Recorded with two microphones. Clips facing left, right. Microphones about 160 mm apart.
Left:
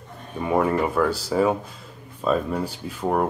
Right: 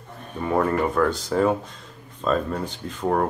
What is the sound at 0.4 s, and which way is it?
Speech, 10° left (ahead or behind).